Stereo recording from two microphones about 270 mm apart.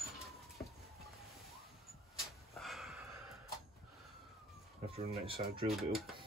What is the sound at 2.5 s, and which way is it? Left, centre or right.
Gasp, centre.